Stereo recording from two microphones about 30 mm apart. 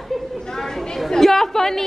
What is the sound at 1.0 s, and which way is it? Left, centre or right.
Chatter, centre.